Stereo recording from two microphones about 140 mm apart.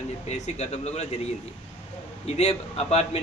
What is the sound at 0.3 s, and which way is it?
Speech, 55° left (ahead or behind).